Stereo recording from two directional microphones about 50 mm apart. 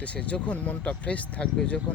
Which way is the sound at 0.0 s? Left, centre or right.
Left.